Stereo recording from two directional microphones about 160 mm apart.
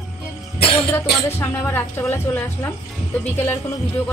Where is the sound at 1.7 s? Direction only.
15° left (ahead or behind).